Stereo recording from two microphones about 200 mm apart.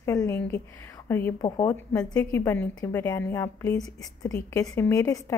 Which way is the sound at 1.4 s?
25° left (ahead or behind).